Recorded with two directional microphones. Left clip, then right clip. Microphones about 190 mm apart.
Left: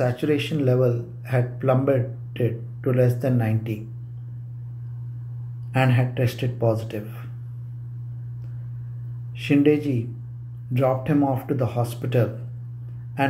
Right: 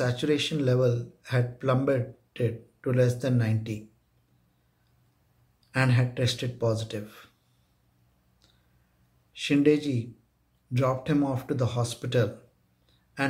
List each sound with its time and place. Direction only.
0.0 s speech: 20° right (ahead or behind)
5.7 s speech: 15° right (ahead or behind)
9.4 s speech: 15° right (ahead or behind)